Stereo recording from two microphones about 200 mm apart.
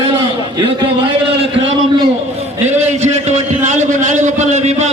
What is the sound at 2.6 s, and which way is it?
A man's voice, 35° right (ahead or behind).